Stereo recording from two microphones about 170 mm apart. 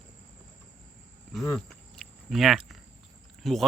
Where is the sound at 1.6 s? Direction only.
Centre (ahead or behind).